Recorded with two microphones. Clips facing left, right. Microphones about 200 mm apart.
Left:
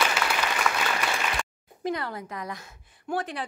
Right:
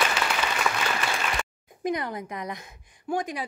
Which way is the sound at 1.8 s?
15° right (ahead or behind).